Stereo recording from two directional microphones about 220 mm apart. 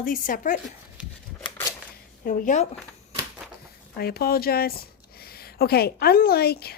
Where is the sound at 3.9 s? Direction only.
45° left (ahead or behind).